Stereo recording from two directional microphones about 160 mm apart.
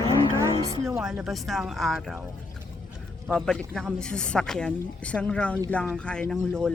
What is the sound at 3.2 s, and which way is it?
A woman's voice, centre (ahead or behind).